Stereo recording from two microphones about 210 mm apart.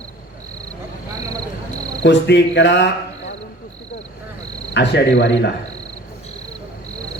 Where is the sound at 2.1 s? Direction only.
55° left (ahead or behind).